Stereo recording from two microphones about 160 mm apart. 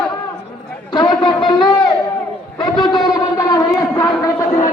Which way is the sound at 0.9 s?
30° left (ahead or behind).